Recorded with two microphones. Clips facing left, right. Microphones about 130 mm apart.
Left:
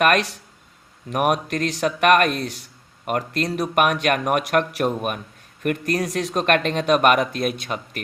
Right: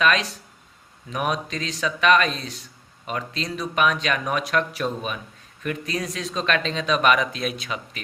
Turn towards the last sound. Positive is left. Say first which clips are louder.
# left 3 dB
turn(degrees=50)  # may be behind; listen again after turning